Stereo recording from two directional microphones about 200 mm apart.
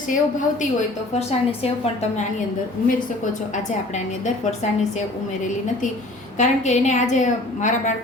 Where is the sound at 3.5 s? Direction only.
35° left (ahead or behind).